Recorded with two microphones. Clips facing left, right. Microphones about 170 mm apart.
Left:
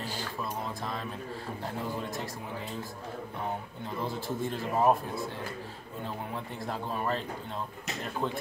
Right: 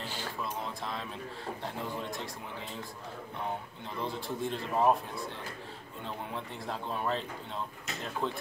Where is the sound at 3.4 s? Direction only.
5° left (ahead or behind).